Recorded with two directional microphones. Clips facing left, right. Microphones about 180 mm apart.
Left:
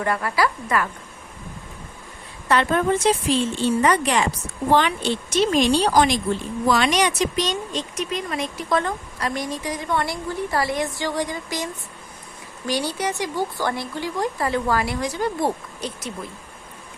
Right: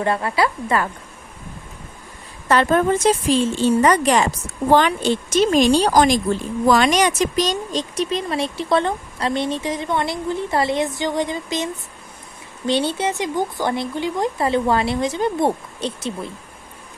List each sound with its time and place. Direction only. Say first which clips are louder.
0.0 s speech: right 2 dB; 25° right (ahead or behind)
2.5 s speech: right 3 dB; 40° right (ahead or behind)